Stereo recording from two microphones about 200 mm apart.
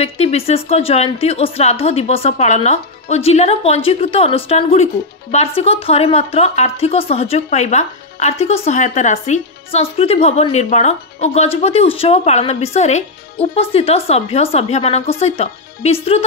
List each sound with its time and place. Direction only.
0.0 s a woman's voice: 30° left (ahead or behind)